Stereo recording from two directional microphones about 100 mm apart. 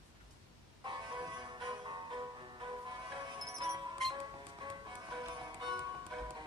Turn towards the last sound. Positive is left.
turn(degrees=-45)  # may be behind; listen again after turning